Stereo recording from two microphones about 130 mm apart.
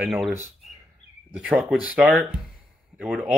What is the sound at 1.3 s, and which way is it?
Speech, 5° right (ahead or behind).